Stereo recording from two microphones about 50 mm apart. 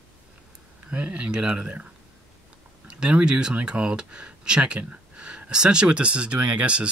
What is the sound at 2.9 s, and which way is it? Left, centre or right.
Speech, right.